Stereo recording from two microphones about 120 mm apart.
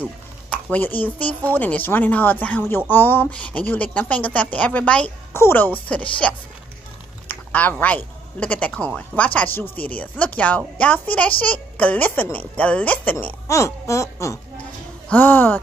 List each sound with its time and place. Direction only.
0.5 s a woman's voice: 15° left (ahead or behind)
7.2 s a sound: 15° left (ahead or behind)
7.7 s a woman's voice: 10° left (ahead or behind)
15.0 s a woman's voice: 15° left (ahead or behind)